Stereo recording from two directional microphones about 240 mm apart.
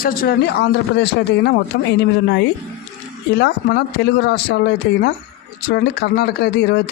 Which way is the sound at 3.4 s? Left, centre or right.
Left.